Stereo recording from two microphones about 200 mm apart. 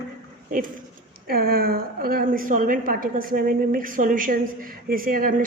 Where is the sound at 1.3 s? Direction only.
50° right (ahead or behind).